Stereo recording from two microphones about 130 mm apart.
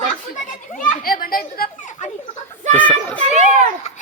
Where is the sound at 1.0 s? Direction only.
90° left.